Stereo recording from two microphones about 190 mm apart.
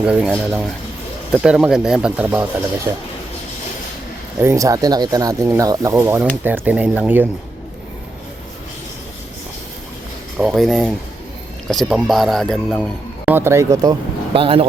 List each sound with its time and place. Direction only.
0.0 s speech: 5° right (ahead or behind)
4.4 s speech: 15° right (ahead or behind)
10.3 s speech: centre (ahead or behind)
13.2 s speech: 10° right (ahead or behind)
14.3 s speech: 30° right (ahead or behind)